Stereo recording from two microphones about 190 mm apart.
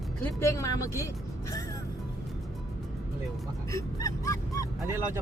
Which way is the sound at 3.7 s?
15° left (ahead or behind).